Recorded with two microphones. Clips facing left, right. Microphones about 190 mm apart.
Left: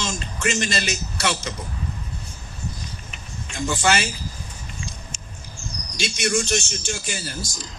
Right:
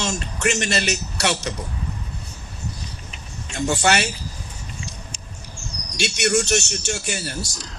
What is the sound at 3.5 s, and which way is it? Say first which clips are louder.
Speech: right 2 dB; 65° right (ahead or behind).